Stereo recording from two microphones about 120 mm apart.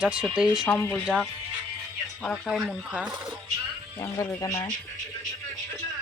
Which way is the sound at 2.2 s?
Centre (ahead or behind).